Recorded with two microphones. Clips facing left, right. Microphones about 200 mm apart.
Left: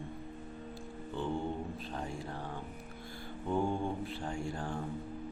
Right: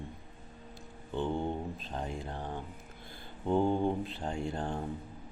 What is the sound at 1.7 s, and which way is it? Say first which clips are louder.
Speech: right 1 dB; 20° right (ahead or behind).